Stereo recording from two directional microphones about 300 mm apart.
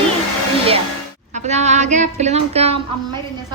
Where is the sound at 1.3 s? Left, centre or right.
Right.